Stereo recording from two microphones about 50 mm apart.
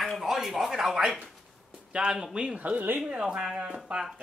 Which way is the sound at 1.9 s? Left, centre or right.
Centre.